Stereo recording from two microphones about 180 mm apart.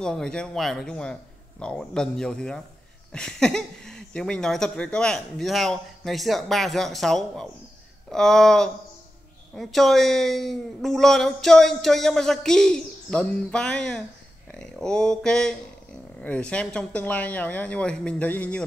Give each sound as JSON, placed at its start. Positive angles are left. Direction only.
{"t": 0.0, "sound": "speech", "side_deg": 5}